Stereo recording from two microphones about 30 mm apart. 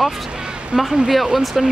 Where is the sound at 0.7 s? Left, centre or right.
Centre.